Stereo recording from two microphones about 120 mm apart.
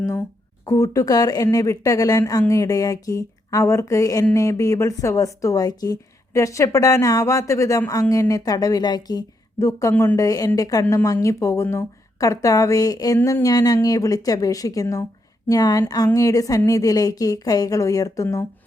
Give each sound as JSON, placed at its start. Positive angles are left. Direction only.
{"t": 0.0, "sound": "speech", "side_deg": 25}
{"t": 9.9, "sound": "speech", "side_deg": 15}
{"t": 10.2, "sound": "a woman's voice", "side_deg": 30}